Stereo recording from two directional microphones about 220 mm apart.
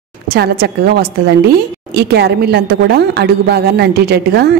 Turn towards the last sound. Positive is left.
turn(degrees=-45)  # may be behind; listen again after turning